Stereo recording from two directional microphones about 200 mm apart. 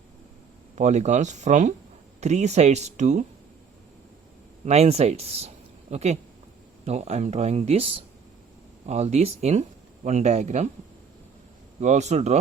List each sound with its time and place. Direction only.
0.8 s speech: 35° right (ahead or behind)
4.6 s speech: 35° right (ahead or behind)
8.9 s speech: 35° right (ahead or behind)
11.8 s speech: 35° right (ahead or behind)